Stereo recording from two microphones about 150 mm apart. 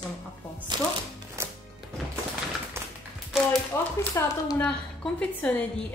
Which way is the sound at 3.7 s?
20° left (ahead or behind).